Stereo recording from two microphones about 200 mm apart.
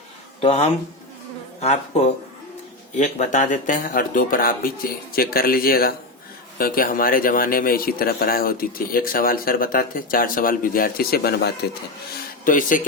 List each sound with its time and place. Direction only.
0.4 s a man's voice: 30° left (ahead or behind); by 11.8 s 55° left (ahead or behind)
12.5 s speech: 40° left (ahead or behind)